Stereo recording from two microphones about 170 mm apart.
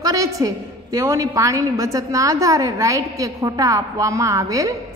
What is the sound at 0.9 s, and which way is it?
A woman's voice, 20° right (ahead or behind).